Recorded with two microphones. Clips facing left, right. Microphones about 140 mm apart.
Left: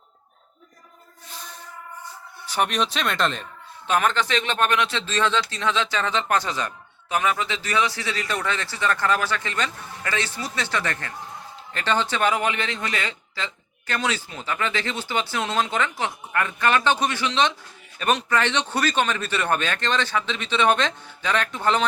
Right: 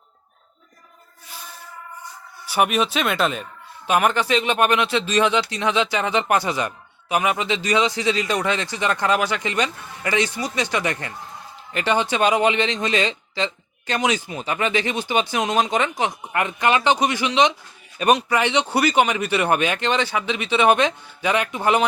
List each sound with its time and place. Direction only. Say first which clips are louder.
2.5 s speech: right 4 dB; 10° right (ahead or behind)